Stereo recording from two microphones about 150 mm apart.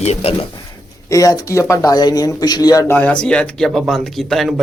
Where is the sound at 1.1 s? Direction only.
20° left (ahead or behind).